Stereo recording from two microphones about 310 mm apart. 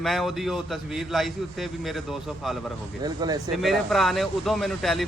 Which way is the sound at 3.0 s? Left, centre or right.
Centre.